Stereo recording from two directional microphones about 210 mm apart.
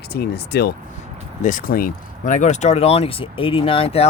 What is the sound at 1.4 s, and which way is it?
Speech, 40° left (ahead or behind).